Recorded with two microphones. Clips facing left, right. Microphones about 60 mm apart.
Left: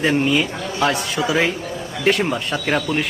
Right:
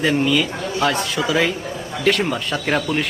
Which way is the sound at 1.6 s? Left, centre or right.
Right.